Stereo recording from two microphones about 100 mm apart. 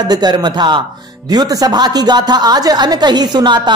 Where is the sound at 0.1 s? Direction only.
45° right (ahead or behind).